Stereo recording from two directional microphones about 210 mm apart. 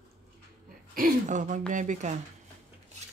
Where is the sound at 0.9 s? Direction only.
40° right (ahead or behind).